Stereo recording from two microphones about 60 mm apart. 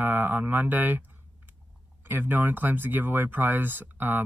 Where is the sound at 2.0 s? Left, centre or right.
Right.